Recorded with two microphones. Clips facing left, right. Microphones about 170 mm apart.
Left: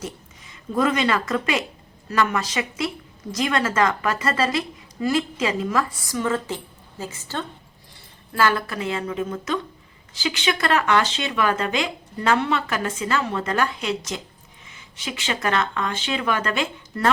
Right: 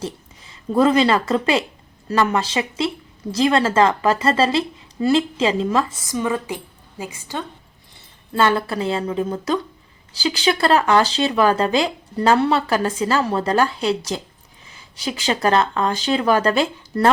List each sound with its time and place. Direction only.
0.0 s a woman's voice: 30° right (ahead or behind); by 7.4 s 15° right (ahead or behind)
8.3 s speech: 25° right (ahead or behind)